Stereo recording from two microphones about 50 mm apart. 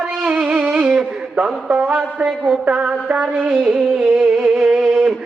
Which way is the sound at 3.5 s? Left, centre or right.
Centre.